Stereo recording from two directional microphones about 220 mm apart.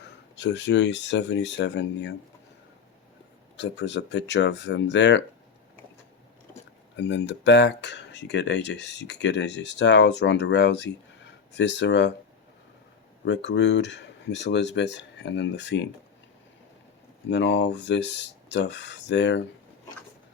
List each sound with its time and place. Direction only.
0.3 s speech: 55° left (ahead or behind)
3.6 s speech: 55° left (ahead or behind)
6.9 s speech: 55° left (ahead or behind)
13.2 s speech: 50° left (ahead or behind)
17.2 s speech: 55° left (ahead or behind)